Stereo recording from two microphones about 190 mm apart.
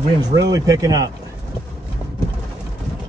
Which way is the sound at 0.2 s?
20° right (ahead or behind).